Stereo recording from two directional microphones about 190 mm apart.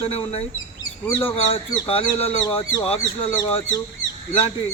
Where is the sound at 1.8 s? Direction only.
30° left (ahead or behind).